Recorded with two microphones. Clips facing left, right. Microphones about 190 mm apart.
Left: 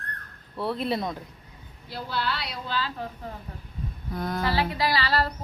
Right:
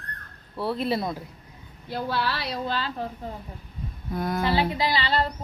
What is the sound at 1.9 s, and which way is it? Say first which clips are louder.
Speech: right 4 dB; 60° right (ahead or behind).